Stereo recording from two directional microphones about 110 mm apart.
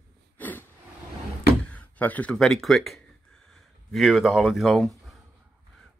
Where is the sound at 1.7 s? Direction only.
15° left (ahead or behind).